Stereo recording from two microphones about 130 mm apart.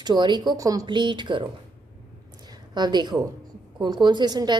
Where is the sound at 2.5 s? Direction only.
35° right (ahead or behind).